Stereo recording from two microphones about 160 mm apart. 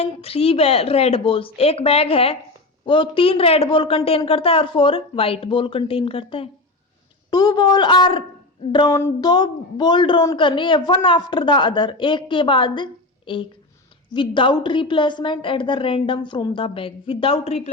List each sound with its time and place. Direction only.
0.0 s a woman's voice: 35° left (ahead or behind)
8.9 s a sound: 15° left (ahead or behind)
9.3 s a man's voice: 25° left (ahead or behind)